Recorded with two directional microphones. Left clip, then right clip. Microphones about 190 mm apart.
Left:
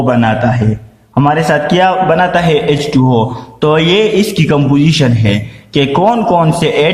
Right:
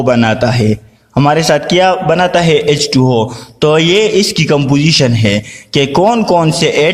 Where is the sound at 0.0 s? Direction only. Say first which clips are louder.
Right 1 dB; 50° right (ahead or behind).